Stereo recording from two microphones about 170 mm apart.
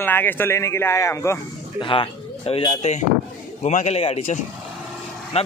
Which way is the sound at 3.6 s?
40° left (ahead or behind).